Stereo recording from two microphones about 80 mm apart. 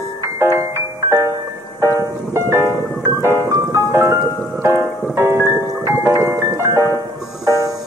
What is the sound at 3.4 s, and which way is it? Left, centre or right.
Music, right.